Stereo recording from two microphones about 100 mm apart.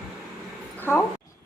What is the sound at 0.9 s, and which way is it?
Speech, 25° left (ahead or behind).